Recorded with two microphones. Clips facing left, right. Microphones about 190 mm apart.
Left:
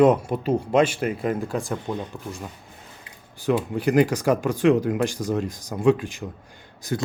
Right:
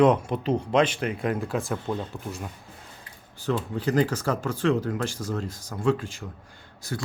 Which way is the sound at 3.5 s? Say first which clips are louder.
Left 4 dB; 15° left (ahead or behind).